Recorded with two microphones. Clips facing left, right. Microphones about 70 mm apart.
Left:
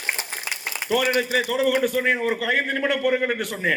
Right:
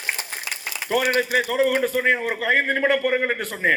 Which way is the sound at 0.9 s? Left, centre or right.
Right.